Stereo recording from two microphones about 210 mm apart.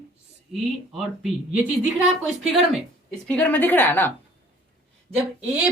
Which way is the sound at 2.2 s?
Centre (ahead or behind).